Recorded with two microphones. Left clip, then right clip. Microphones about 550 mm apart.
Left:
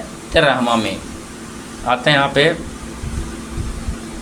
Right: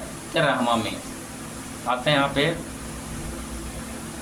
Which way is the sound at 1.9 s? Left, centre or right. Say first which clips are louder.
Left 7 dB; right.